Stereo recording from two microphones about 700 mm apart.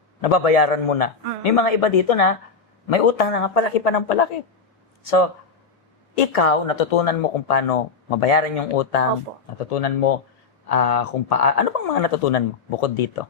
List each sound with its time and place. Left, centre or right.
0.2 s speech: left